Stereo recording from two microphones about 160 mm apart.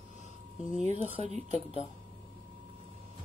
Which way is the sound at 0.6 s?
50° left (ahead or behind).